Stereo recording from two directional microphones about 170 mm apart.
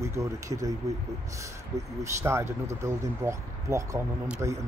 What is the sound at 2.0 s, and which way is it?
Speech, 15° right (ahead or behind).